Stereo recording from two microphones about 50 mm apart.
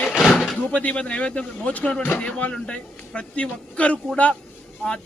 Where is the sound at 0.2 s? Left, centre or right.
Centre.